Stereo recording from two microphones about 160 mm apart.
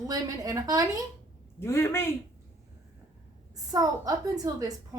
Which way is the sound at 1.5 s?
15° left (ahead or behind).